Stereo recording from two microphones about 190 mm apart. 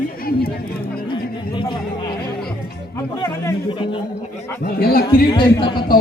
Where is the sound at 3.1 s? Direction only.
15° left (ahead or behind).